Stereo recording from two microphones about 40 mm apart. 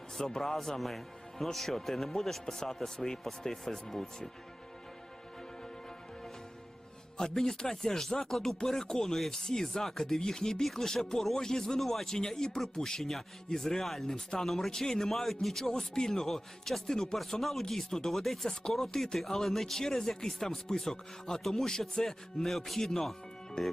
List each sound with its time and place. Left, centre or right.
0.2 s speech: centre
7.2 s speech: centre